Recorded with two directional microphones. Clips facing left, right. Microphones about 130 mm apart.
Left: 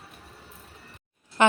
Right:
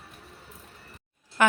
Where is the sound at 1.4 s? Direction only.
25° left (ahead or behind).